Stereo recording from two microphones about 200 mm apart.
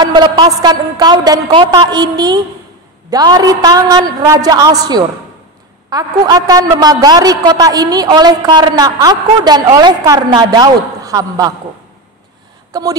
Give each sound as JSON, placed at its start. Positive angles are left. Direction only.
{"t": 0.0, "sound": "a woman's voice", "side_deg": -20}
{"t": 12.7, "sound": "a woman's voice", "side_deg": -20}